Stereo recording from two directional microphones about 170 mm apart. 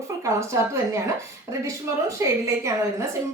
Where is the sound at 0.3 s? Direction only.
15° right (ahead or behind).